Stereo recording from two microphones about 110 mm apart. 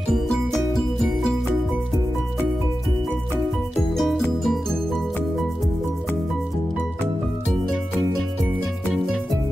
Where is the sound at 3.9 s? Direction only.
5° left (ahead or behind).